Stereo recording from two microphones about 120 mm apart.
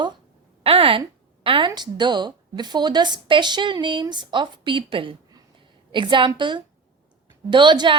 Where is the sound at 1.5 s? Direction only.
45° right (ahead or behind).